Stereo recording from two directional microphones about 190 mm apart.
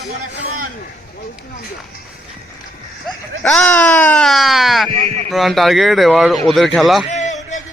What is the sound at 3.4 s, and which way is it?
Speech, 5° left (ahead or behind).